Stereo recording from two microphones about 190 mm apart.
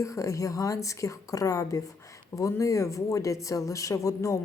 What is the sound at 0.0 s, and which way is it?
Speech, 15° left (ahead or behind).